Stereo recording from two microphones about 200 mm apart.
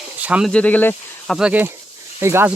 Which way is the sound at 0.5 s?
5° left (ahead or behind).